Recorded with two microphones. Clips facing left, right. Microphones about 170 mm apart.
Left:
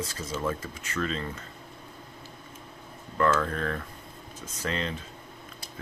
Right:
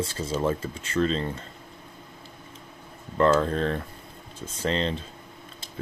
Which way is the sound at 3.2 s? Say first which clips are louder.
Right 5 dB; 30° right (ahead or behind).